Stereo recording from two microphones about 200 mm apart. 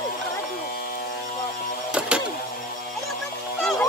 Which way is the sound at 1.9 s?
5° right (ahead or behind).